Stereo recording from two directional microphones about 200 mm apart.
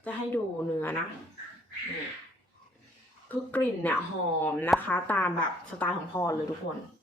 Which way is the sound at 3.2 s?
10° left (ahead or behind).